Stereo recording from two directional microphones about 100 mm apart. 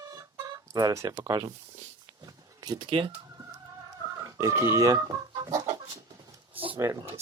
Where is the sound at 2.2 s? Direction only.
40° right (ahead or behind).